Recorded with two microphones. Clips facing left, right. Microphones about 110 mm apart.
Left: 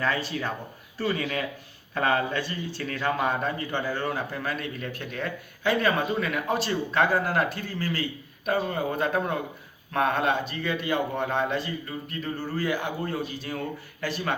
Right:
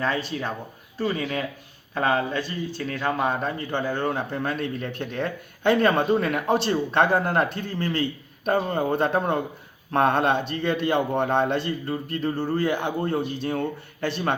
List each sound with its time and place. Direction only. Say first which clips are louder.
0.0 s speech: right 1 dB; 20° right (ahead or behind)